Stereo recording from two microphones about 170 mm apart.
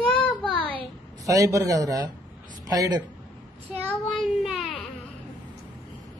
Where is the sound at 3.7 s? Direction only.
5° right (ahead or behind).